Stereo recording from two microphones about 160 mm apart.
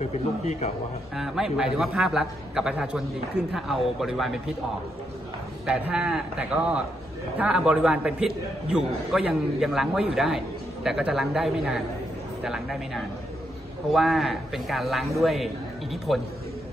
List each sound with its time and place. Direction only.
0.0 s a man's voice: 45° left (ahead or behind)
1.1 s a man's voice: centre (ahead or behind)
5.7 s a man's voice: 5° right (ahead or behind)